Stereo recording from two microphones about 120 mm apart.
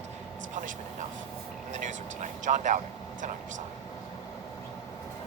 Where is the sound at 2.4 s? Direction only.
90° right.